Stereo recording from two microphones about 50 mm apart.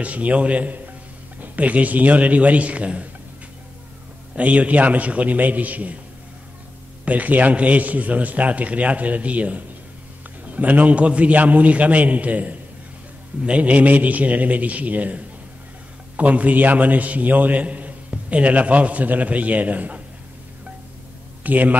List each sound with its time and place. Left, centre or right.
0.0 s a man's voice: right
4.4 s a man's voice: right
7.1 s a man's voice: right
21.4 s a man's voice: right